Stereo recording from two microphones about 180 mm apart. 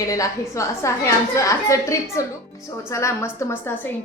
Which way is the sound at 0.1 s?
15° left (ahead or behind).